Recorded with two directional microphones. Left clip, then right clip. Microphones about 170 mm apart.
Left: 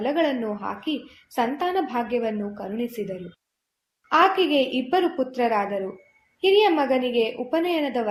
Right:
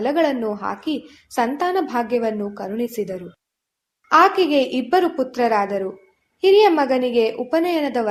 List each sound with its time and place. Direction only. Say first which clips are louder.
0.0 s a woman's voice: right 4 dB; 35° right (ahead or behind)